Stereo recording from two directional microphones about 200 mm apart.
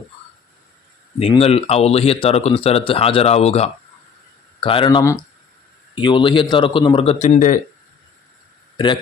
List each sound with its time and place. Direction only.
1.2 s speech: 30° left (ahead or behind)
8.8 s speech: 20° left (ahead or behind)